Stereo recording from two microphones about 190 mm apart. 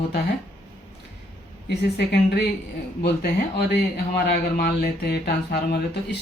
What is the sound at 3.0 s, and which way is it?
Speech, 55° left (ahead or behind).